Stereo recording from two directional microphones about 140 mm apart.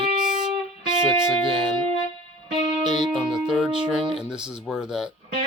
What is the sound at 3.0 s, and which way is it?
Speech, centre (ahead or behind).